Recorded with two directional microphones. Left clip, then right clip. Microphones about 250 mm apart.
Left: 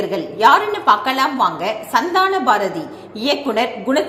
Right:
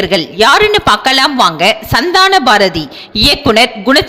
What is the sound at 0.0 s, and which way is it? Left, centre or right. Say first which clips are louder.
A woman's voice: right 5 dB; right.